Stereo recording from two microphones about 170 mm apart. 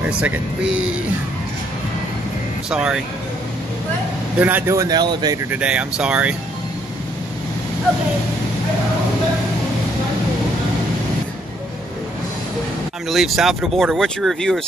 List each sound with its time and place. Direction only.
0.0 s speech: 10° right (ahead or behind)
2.7 s speech: 5° right (ahead or behind)
4.4 s speech: 10° right (ahead or behind)
5.5 s speech: 5° right (ahead or behind)
13.1 s speech: centre (ahead or behind)